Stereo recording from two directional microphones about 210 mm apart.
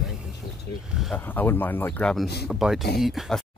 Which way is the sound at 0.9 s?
Centre (ahead or behind).